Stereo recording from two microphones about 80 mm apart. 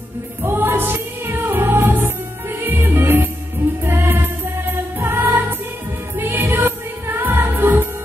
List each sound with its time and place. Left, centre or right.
0.4 s music: right